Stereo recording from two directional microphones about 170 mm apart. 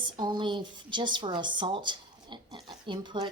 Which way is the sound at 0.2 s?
25° right (ahead or behind).